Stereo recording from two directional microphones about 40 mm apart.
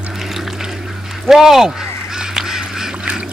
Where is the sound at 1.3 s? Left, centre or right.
Centre.